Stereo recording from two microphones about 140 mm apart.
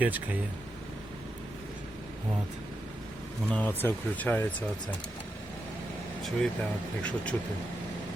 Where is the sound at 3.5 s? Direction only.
15° left (ahead or behind).